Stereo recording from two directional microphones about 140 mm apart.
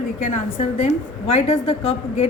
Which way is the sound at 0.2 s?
60° left (ahead or behind).